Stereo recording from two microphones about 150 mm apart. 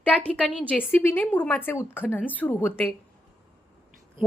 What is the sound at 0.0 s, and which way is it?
A woman's voice, 10° left (ahead or behind).